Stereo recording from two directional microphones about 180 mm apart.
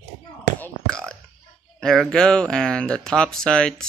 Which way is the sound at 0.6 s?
5° left (ahead or behind).